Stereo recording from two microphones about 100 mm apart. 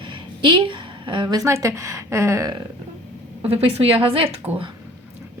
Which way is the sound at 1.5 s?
30° right (ahead or behind).